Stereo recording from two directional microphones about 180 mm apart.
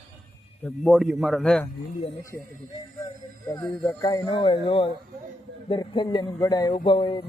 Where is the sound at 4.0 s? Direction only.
20° left (ahead or behind).